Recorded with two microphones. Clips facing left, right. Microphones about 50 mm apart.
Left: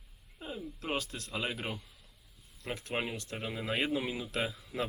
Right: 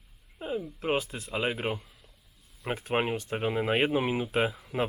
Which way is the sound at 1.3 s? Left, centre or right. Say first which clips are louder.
Right 7 dB; right.